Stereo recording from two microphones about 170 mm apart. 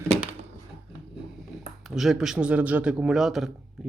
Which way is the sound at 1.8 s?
Centre (ahead or behind).